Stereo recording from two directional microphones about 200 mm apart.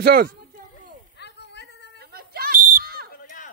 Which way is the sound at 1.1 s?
60° left (ahead or behind).